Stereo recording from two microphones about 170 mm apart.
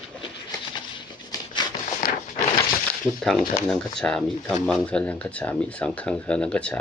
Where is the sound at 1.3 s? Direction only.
25° left (ahead or behind).